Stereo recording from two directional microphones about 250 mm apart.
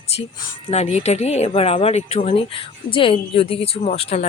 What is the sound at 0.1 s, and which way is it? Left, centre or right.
Speech, left.